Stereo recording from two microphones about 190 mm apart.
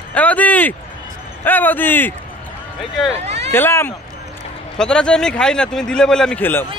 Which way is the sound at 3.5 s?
10° left (ahead or behind).